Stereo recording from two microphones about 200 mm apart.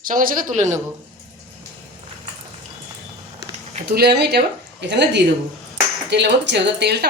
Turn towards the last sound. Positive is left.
turn(degrees=-55)  # may be behind; listen again after turning